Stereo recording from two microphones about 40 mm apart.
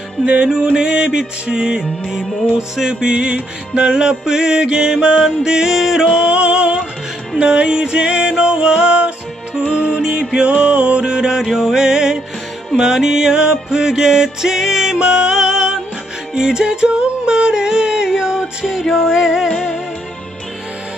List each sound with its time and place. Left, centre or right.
0.3 s music: right; by 6.0 s centre
6.0 s music: centre
14.9 s music: centre
19.5 s music: centre